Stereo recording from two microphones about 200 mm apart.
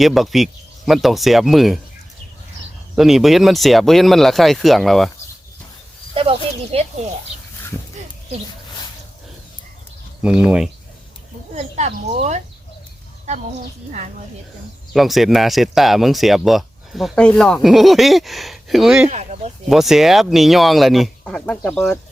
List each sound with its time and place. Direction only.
0.0 s speech: centre (ahead or behind)
2.9 s speech: centre (ahead or behind)
6.1 s speech: 30° right (ahead or behind)
10.2 s speech: 5° right (ahead or behind)
11.5 s speech: 35° right (ahead or behind)
14.9 s speech: centre (ahead or behind)
19.0 s speech: 35° right (ahead or behind)
19.6 s speech: centre (ahead or behind)